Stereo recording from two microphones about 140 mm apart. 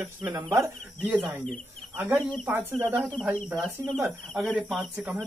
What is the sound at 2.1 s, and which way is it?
Speech, 10° left (ahead or behind).